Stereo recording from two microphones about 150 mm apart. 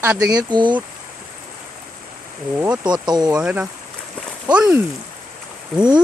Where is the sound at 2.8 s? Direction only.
30° right (ahead or behind).